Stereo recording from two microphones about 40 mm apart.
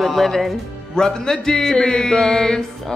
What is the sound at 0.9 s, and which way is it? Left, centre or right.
Mantra, centre.